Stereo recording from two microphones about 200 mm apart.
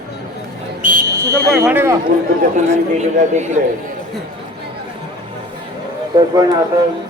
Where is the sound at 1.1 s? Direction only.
15° right (ahead or behind).